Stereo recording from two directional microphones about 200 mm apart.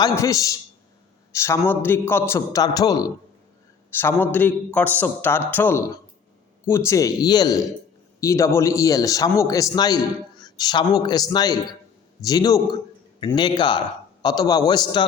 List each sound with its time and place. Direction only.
0.0 s a man's voice: 15° left (ahead or behind)